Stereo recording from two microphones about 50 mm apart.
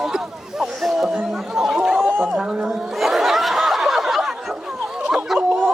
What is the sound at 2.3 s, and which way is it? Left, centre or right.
Speech, centre.